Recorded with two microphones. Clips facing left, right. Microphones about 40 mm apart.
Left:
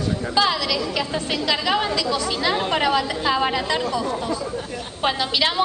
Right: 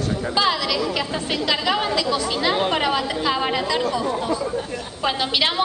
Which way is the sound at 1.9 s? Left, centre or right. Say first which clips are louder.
Right 1 dB; centre.